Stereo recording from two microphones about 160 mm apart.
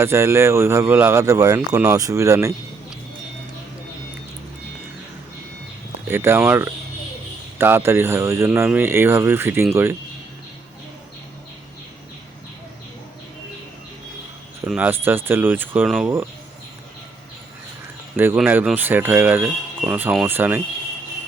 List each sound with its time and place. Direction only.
0.0 s speech: 15° right (ahead or behind)
6.1 s speech: 15° right (ahead or behind)
14.7 s speech: 10° right (ahead or behind)
18.3 s speech: 10° right (ahead or behind)